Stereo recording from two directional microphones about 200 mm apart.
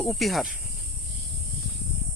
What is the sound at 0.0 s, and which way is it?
Speech, centre (ahead or behind).